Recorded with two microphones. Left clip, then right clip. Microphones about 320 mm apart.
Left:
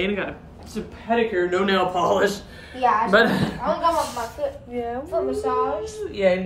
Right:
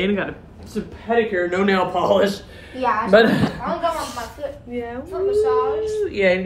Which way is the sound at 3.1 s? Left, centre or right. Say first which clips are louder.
Right 4 dB; centre.